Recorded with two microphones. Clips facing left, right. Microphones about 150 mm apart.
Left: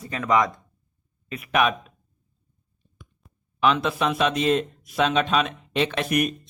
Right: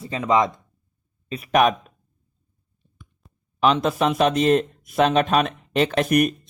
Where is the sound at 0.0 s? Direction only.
25° right (ahead or behind).